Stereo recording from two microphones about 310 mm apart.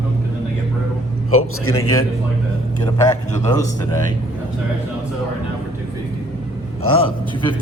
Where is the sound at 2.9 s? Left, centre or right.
Centre.